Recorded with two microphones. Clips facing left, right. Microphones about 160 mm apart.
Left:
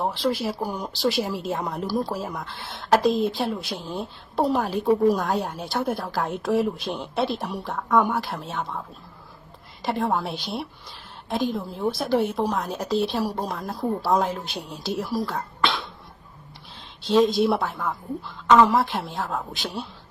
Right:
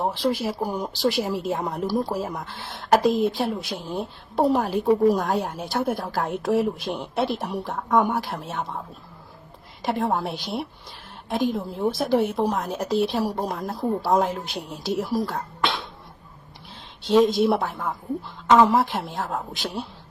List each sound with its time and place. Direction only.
0.3 s a woman's voice: centre (ahead or behind)
3.8 s speech: 20° right (ahead or behind)
4.5 s a woman's voice: centre (ahead or behind)
9.8 s a woman's voice: centre (ahead or behind)
15.3 s throat clearing: centre (ahead or behind)
17.1 s a woman's voice: 5° right (ahead or behind)